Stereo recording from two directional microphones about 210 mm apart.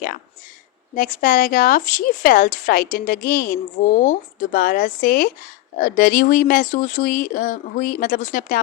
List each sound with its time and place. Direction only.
0.9 s speech: 40° left (ahead or behind)